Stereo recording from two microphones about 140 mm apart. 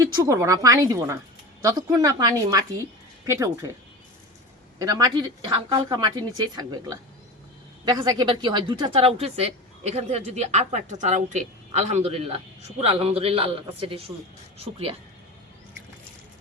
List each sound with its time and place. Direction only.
0.0 s a woman's voice: 25° right (ahead or behind)
4.8 s a woman's voice: 25° right (ahead or behind); by 14.9 s 45° right (ahead or behind)